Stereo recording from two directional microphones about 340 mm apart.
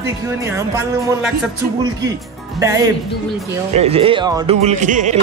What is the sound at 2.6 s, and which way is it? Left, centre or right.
Speech, centre.